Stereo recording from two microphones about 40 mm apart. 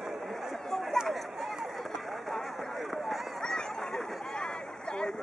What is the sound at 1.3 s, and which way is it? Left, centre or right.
Run, centre.